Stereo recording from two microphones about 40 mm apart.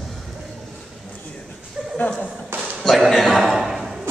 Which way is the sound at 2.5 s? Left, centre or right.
Right.